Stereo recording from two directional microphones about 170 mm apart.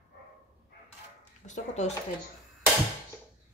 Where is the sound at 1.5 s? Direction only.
45° left (ahead or behind).